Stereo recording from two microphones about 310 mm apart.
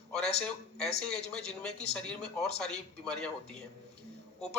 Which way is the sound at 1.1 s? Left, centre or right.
Centre.